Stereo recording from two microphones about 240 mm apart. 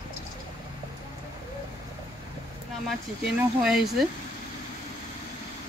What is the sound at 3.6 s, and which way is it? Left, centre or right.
Speech, centre.